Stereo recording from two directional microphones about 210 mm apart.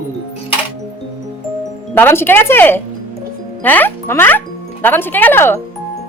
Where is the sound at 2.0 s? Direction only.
10° left (ahead or behind).